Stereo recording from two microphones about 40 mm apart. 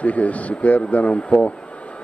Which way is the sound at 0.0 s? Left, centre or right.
Left.